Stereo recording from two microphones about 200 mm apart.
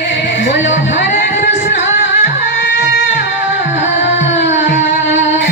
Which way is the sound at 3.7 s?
35° left (ahead or behind).